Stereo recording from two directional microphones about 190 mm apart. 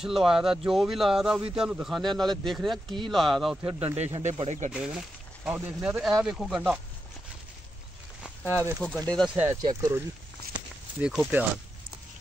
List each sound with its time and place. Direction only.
0.0 s speech: centre (ahead or behind)
4.0 s speech: 35° right (ahead or behind)
4.6 s speech: 5° right (ahead or behind)
9.0 s speech: 5° left (ahead or behind)
9.3 s speech: 10° right (ahead or behind)
11.0 s speech: 5° right (ahead or behind)